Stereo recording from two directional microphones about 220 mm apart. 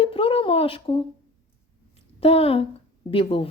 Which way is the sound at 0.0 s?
25° left (ahead or behind).